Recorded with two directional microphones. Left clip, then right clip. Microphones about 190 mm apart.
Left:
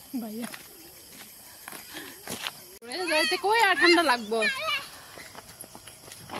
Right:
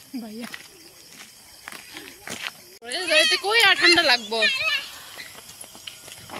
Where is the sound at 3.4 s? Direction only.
60° left (ahead or behind).